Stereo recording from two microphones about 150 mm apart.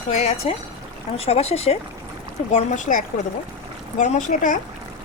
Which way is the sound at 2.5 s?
55° left (ahead or behind).